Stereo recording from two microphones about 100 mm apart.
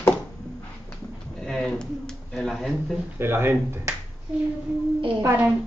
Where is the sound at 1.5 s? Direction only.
10° left (ahead or behind).